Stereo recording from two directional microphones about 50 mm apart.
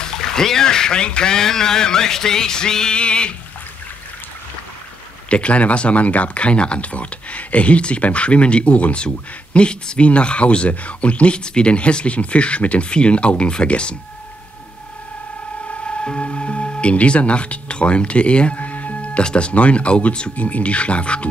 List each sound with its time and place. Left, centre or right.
0.0 s speech: centre
5.3 s speech: left
15.9 s speech: left